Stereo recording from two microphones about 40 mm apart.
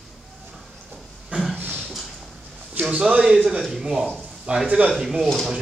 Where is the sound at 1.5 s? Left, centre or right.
Right.